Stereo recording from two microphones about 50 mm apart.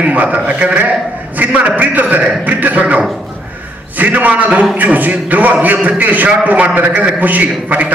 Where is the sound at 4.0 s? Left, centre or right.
Right.